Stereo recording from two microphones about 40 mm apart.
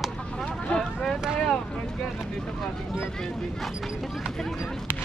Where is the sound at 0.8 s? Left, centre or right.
Centre.